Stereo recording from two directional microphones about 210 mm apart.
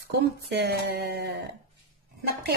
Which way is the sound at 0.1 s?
50° right (ahead or behind).